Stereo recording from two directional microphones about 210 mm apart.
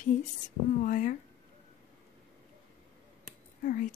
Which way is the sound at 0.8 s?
40° left (ahead or behind).